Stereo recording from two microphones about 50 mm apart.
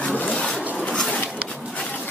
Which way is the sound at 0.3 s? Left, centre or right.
Centre.